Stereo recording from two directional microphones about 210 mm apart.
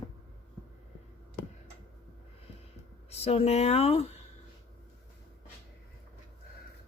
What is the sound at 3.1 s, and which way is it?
Speech, 30° left (ahead or behind).